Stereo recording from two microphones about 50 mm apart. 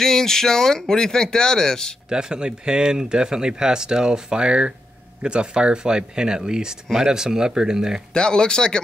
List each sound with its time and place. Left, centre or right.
0.0 s speech: centre
2.0 s speech: centre
8.1 s speech: centre